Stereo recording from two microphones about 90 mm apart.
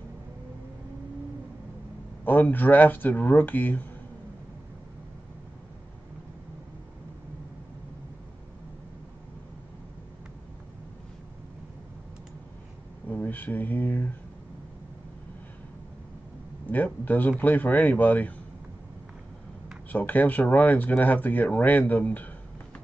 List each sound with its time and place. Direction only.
2.2 s speech: 20° left (ahead or behind)
13.1 s speech: 20° left (ahead or behind)
16.6 s speech: 20° left (ahead or behind)
19.9 s speech: 20° left (ahead or behind)